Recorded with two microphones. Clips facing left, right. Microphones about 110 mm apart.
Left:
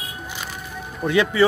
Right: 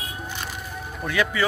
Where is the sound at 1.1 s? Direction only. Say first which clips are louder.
Left 6 dB; 25° left (ahead or behind).